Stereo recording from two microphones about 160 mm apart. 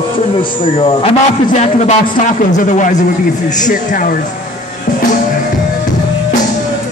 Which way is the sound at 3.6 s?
55° left (ahead or behind).